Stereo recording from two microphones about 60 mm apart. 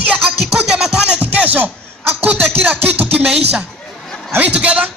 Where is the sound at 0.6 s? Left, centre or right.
Centre; by 3.3 s right.